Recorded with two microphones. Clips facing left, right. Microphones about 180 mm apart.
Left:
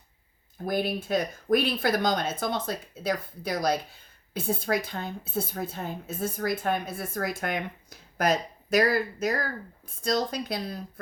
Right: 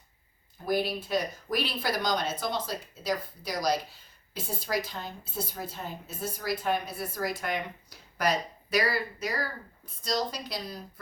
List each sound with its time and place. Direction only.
0.6 s speech: 50° left (ahead or behind)